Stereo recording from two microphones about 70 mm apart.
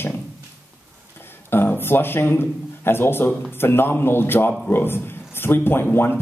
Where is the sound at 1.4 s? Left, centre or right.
Left.